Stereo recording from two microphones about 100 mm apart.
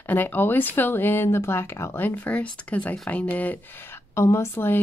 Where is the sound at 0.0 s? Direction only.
20° left (ahead or behind).